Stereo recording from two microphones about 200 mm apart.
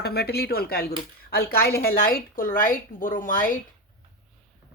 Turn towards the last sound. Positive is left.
turn(degrees=45)  # may be behind; listen again after turning